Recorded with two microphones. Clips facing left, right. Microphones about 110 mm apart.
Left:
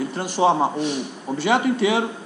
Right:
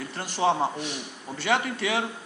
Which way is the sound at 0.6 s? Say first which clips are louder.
Left 6 dB; 30° left (ahead or behind).